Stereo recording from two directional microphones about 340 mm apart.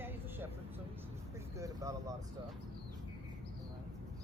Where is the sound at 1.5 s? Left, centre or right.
Centre.